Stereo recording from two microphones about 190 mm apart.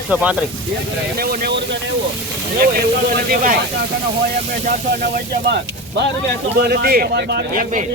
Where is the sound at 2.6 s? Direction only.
50° right (ahead or behind).